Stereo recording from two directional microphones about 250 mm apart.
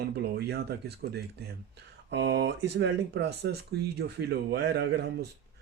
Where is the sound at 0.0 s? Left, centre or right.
Right.